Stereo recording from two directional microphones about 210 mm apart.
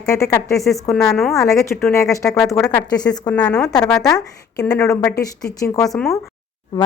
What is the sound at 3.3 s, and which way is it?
Speech, 5° left (ahead or behind).